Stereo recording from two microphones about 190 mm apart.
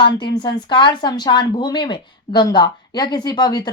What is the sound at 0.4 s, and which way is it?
Speech, 25° left (ahead or behind).